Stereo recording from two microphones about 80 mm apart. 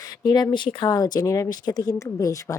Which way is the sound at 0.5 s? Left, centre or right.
Left.